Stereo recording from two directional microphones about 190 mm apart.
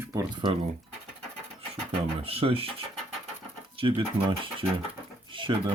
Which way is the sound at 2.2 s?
30° right (ahead or behind).